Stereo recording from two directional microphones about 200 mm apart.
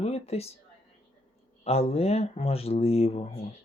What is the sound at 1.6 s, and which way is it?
Speech, 30° left (ahead or behind).